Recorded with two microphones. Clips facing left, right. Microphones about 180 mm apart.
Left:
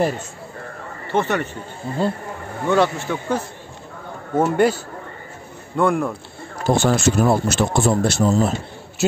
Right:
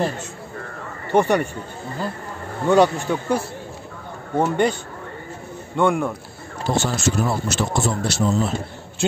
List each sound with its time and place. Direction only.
1.1 s speech: 15° right (ahead or behind)
2.0 s speech: 30° left (ahead or behind)
2.7 s speech: 15° right (ahead or behind)
4.4 s speech: 5° left (ahead or behind)
5.8 s speech: centre (ahead or behind)
6.7 s speech: 55° left (ahead or behind)